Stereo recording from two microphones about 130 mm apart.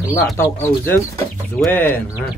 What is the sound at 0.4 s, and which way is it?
Speech, 15° left (ahead or behind).